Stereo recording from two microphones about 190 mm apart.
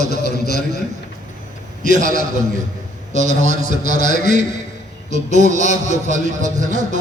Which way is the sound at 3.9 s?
40° right (ahead or behind).